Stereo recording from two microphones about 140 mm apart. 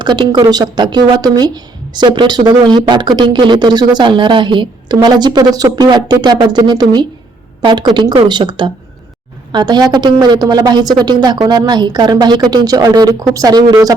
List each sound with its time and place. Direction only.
0.0 s a woman's voice: 30° right (ahead or behind)